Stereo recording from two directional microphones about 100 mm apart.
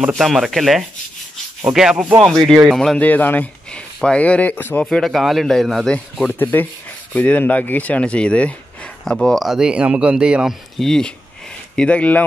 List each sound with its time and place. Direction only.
0.1 s speech: centre (ahead or behind)
3.0 s speech: 15° left (ahead or behind)
4.8 s speech: centre (ahead or behind)
6.2 s speech: 15° left (ahead or behind); by 10.5 s 10° right (ahead or behind)
10.8 s speech: 5° left (ahead or behind)